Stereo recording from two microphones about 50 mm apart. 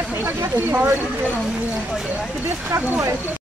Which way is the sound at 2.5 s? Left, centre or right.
Right.